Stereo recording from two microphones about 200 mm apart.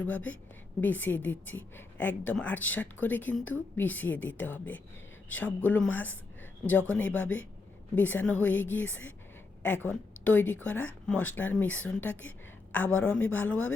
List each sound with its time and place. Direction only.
0.0 s a woman's voice: 10° left (ahead or behind)